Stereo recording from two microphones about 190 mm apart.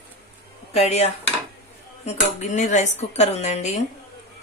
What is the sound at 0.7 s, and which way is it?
Speech, 35° left (ahead or behind).